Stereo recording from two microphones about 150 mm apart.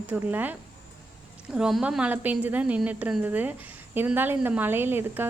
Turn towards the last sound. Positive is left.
turn(degrees=-15)  # may be behind; listen again after turning